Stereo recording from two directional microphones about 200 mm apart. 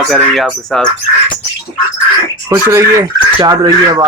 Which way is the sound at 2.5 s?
15° right (ahead or behind).